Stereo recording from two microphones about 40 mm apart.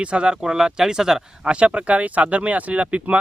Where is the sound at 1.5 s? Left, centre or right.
Right.